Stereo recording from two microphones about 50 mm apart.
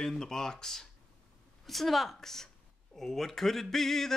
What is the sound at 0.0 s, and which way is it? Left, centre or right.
Speech, centre.